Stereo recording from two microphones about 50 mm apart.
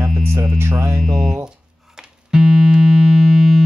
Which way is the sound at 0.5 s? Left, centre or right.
Right.